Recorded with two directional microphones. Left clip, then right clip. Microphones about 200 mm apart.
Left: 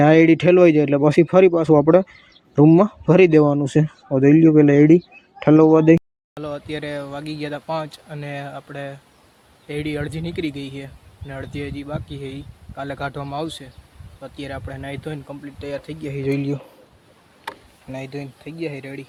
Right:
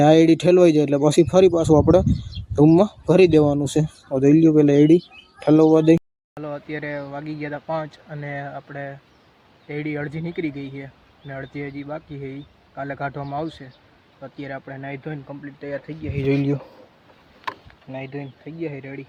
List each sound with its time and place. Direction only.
0.0 s speech: centre (ahead or behind)
6.3 s speech: 15° left (ahead or behind)
16.2 s speech: centre (ahead or behind)
17.9 s speech: 20° left (ahead or behind)